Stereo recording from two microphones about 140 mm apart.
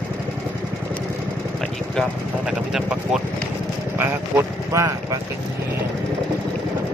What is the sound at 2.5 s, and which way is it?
Speech, 5° right (ahead or behind).